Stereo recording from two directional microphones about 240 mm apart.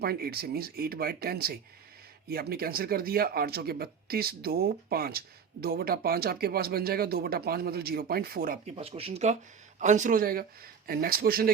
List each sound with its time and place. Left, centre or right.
0.0 s speech: right
8.7 s speech: right